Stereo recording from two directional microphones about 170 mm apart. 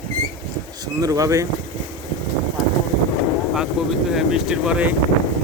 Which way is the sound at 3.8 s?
5° right (ahead or behind).